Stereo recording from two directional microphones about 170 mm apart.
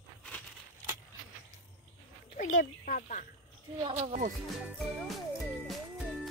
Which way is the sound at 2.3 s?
50° left (ahead or behind).